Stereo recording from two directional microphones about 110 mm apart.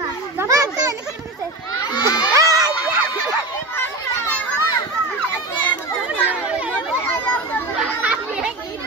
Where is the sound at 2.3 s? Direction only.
30° right (ahead or behind).